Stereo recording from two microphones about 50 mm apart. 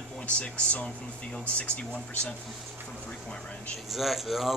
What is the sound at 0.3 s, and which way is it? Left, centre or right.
Speech, left.